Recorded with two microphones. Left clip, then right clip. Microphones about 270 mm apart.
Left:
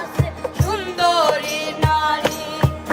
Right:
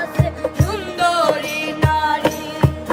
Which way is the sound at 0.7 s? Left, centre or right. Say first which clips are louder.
Left 2 dB; centre.